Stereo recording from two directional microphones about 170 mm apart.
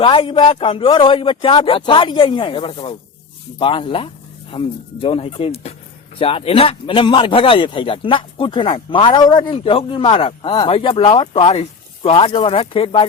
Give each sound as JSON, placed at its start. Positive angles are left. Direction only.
{"t": 0.0, "sound": "speech", "side_deg": 30}